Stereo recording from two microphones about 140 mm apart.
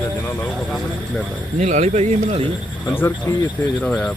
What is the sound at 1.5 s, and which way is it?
Speech, 55° right (ahead or behind).